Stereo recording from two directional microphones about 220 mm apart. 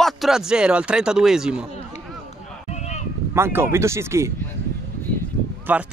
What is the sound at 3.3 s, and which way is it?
Speech, 10° right (ahead or behind).